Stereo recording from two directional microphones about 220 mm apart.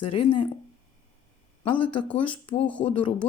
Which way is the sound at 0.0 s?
25° left (ahead or behind).